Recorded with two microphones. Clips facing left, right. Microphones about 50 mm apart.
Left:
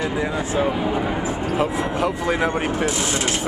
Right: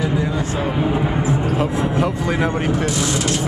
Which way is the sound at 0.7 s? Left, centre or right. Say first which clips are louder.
Right 3 dB; centre.